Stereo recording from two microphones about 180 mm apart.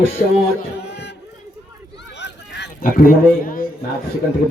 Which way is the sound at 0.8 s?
70° left (ahead or behind).